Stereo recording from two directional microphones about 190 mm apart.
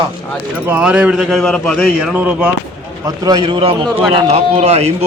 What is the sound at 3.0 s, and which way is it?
A man's voice, 20° right (ahead or behind).